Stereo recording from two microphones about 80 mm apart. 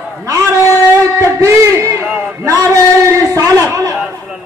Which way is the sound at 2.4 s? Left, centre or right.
Right.